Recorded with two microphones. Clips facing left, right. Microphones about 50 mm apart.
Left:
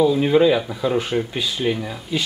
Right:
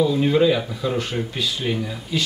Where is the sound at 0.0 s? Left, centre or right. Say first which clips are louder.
Left 2 dB; centre.